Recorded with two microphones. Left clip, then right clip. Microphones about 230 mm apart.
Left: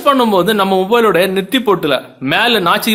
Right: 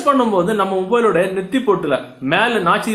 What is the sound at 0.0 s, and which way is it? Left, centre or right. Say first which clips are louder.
Speech: left 4 dB; left.